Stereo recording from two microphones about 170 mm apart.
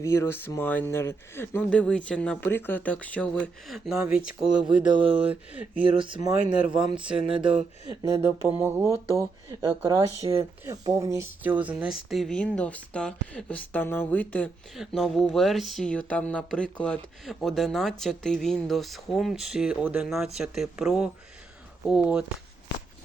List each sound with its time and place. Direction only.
0.0 s speech: 15° left (ahead or behind)
4.1 s speech: 5° right (ahead or behind)
5.7 s speech: 30° right (ahead or behind)
6.5 s speech: 5° right (ahead or behind)
7.9 s speech: 20° right (ahead or behind)